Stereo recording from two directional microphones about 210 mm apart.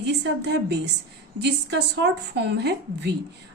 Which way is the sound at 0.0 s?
55° right (ahead or behind).